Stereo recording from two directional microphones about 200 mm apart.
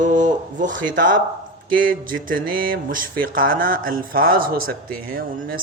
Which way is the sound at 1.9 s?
45° right (ahead or behind).